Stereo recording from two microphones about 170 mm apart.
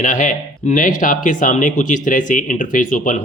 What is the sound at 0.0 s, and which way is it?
Speech, 50° left (ahead or behind).